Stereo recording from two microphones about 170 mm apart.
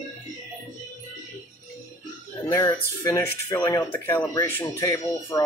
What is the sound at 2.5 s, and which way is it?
Speech, 20° left (ahead or behind).